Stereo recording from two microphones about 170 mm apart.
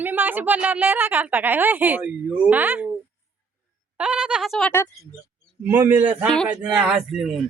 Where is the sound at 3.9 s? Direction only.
5° right (ahead or behind).